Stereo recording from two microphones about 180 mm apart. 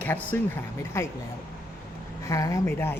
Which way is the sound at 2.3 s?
15° left (ahead or behind).